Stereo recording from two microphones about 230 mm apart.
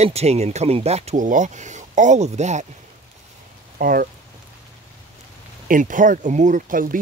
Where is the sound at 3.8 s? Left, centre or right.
Right.